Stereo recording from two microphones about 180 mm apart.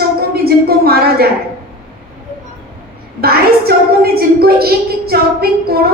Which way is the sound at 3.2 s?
60° right (ahead or behind).